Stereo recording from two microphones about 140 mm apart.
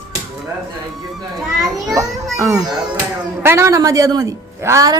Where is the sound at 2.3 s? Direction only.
25° right (ahead or behind).